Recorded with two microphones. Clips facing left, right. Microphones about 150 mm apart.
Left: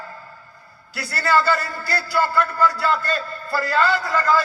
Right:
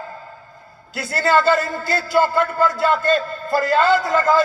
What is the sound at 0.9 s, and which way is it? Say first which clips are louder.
A man's voice: right 3 dB; 20° right (ahead or behind).